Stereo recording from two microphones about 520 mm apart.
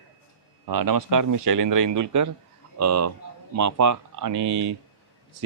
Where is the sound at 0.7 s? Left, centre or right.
Right.